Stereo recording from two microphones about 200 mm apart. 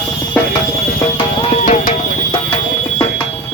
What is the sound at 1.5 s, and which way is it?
Music, 40° left (ahead or behind).